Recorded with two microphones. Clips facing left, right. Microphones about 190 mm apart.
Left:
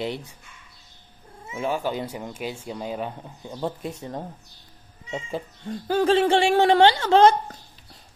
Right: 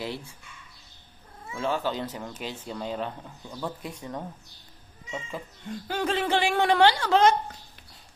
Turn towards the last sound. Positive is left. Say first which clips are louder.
# left 4 dB
turn(degrees=30)  # may be behind; listen again after turning